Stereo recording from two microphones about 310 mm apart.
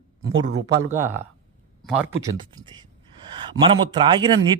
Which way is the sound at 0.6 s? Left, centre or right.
Centre.